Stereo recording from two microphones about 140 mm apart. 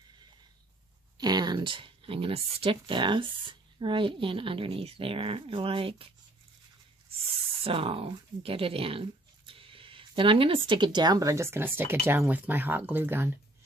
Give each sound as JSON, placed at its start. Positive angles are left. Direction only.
{"t": 1.2, "sound": "speech", "side_deg": -30}
{"t": 7.6, "sound": "speech", "side_deg": -40}